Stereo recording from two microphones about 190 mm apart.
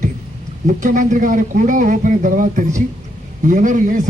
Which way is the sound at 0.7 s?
40° right (ahead or behind).